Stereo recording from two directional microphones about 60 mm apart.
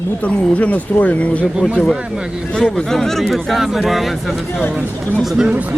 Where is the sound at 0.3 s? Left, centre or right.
Left.